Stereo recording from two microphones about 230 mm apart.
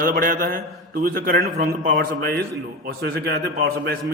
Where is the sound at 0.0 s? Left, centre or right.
Right.